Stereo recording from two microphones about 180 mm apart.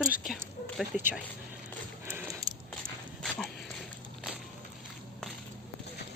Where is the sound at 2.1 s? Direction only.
20° right (ahead or behind).